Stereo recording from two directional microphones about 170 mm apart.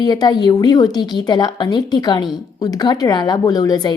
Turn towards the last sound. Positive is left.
turn(degrees=25)  # may be behind; listen again after turning